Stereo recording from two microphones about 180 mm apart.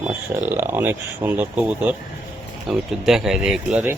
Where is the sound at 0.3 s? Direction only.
15° right (ahead or behind).